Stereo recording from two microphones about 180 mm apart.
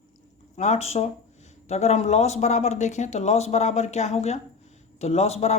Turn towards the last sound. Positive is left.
turn(degrees=35)  # may be behind; listen again after turning